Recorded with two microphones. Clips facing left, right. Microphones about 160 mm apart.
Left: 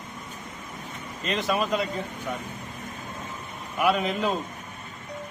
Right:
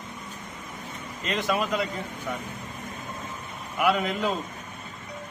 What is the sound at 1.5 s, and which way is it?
Speech, 20° left (ahead or behind).